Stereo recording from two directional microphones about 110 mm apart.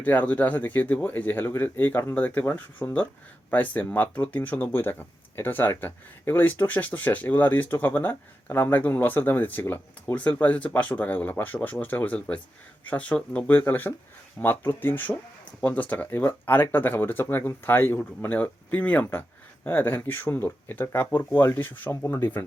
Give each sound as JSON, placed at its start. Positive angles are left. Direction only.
{"t": 0.0, "sound": "speech", "side_deg": 15}